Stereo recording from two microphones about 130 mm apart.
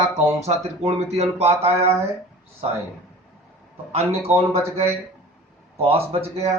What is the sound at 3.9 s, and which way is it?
Speech, 55° right (ahead or behind).